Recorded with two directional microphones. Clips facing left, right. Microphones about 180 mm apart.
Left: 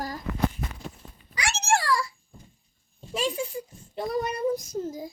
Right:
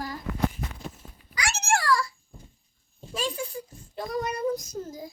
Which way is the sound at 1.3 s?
30° left (ahead or behind).